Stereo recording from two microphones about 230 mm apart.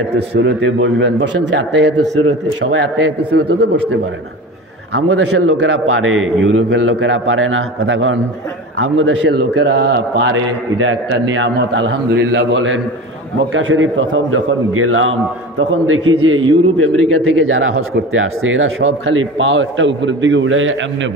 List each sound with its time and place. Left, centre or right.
0.1 s a man's voice: right
4.9 s a man's voice: right
5.3 s a man's voice: right